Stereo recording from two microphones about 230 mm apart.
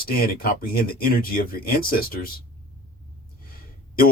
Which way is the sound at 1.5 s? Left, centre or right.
Left.